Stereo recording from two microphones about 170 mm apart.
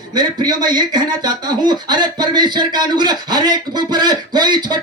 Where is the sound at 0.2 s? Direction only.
25° right (ahead or behind).